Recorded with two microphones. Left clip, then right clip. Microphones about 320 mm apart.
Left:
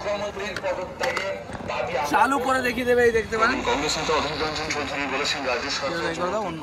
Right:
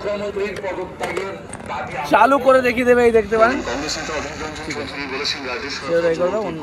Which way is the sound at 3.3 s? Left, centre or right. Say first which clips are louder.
Right 6 dB; centre.